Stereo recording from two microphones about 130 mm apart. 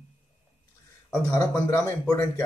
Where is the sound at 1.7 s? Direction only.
25° left (ahead or behind).